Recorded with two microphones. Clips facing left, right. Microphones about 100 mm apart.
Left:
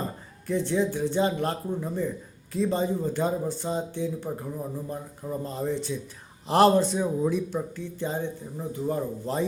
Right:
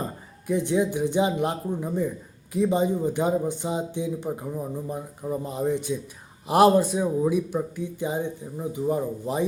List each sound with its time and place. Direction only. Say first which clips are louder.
0.4 s speech: right 2 dB; 15° right (ahead or behind)